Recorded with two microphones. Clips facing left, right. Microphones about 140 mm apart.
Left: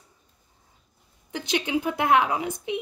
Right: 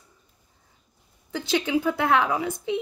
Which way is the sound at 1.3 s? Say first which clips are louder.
Right 2 dB; 15° left (ahead or behind).